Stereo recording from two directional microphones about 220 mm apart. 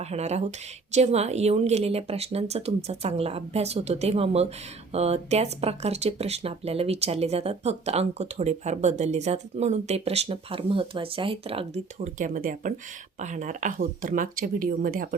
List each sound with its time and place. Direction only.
0.0 s speech: 30° right (ahead or behind)